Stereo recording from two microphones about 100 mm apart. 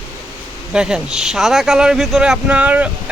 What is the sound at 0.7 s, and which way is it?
Speech, 5° right (ahead or behind).